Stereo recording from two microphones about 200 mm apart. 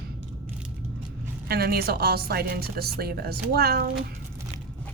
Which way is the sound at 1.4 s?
50° right (ahead or behind).